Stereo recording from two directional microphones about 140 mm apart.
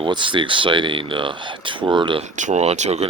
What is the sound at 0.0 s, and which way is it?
Speech, 35° right (ahead or behind).